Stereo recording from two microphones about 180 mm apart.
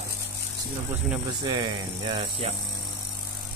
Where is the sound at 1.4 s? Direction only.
25° right (ahead or behind).